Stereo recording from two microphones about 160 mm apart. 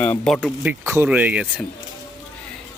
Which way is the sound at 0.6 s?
15° right (ahead or behind).